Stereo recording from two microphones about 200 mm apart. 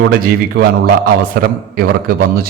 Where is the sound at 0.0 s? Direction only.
50° right (ahead or behind).